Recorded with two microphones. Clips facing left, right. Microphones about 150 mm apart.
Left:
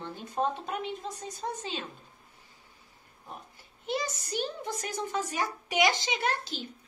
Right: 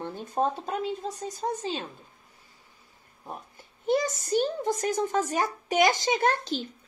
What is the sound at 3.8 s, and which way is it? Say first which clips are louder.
Speech: right 8 dB; 45° right (ahead or behind).